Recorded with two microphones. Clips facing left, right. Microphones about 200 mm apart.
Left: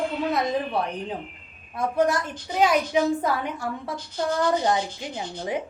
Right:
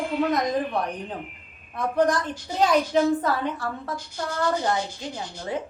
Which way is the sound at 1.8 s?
10° left (ahead or behind).